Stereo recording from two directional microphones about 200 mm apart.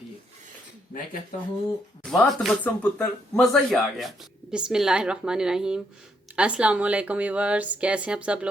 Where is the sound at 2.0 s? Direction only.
Centre (ahead or behind).